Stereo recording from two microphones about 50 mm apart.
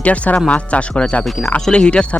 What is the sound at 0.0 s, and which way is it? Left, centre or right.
Speech, left.